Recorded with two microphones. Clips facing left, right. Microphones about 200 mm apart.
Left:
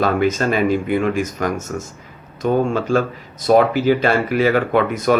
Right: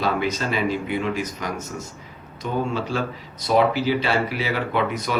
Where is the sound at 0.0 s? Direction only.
50° left (ahead or behind).